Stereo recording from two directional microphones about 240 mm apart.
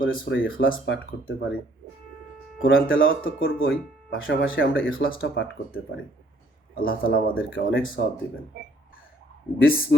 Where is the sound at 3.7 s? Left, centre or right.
Left.